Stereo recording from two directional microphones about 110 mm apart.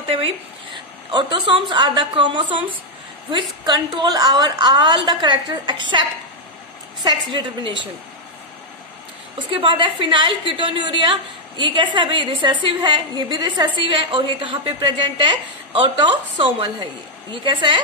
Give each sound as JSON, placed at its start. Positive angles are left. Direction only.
{"t": 1.1, "sound": "a woman's voice", "side_deg": -45}
{"t": 3.6, "sound": "a woman's voice", "side_deg": -40}
{"t": 9.4, "sound": "a woman's voice", "side_deg": -45}